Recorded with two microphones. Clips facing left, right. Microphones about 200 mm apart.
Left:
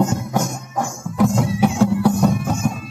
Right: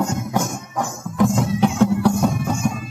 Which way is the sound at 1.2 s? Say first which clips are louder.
Left 1 dB; centre (ahead or behind).